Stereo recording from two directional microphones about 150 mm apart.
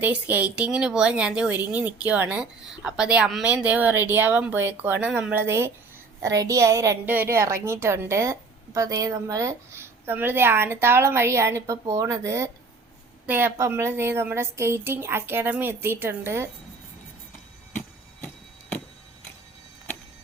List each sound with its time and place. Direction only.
0.0 s a woman's voice: 10° right (ahead or behind)